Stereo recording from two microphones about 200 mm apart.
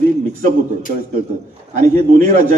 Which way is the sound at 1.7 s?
40° right (ahead or behind).